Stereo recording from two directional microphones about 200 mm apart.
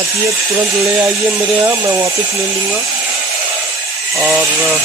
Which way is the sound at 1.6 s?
10° right (ahead or behind).